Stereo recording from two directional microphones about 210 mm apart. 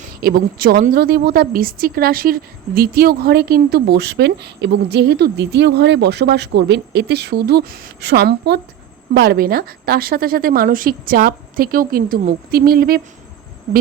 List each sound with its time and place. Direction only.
0.2 s speech: 45° right (ahead or behind)